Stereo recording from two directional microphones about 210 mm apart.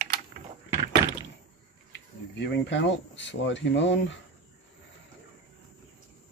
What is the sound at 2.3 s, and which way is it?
Speech, 55° left (ahead or behind).